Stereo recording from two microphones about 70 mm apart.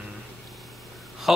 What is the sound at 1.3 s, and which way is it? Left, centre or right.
Speech, centre.